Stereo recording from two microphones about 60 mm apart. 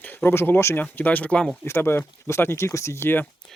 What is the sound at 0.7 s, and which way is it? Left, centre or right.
Speech, left.